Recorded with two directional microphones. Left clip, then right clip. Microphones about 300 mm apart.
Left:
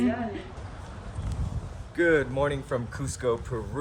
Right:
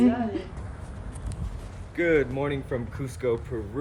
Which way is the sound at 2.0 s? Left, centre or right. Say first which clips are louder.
Even; centre.